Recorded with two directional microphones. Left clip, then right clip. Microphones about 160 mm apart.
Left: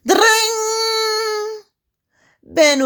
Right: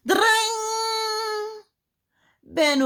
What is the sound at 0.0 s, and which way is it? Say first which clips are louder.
Female singing: left 6 dB; 40° left (ahead or behind).